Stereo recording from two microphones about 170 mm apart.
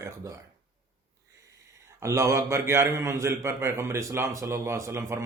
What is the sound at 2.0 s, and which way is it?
A man's voice, 15° right (ahead or behind).